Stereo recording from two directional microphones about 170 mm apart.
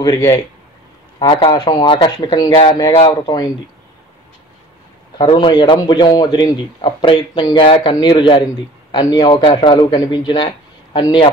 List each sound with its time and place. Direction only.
0.0 s a man's voice: 20° left (ahead or behind)
5.1 s a man's voice: 30° left (ahead or behind)